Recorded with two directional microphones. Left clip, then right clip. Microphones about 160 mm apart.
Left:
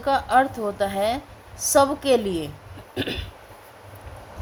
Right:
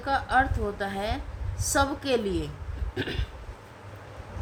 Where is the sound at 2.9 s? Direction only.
35° left (ahead or behind).